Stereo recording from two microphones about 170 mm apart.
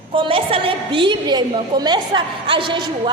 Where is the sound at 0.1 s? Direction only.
30° right (ahead or behind).